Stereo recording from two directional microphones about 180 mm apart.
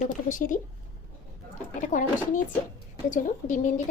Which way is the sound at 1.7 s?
45° left (ahead or behind).